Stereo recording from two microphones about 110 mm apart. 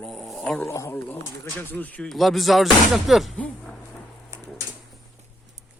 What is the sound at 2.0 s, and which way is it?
Speech, centre (ahead or behind).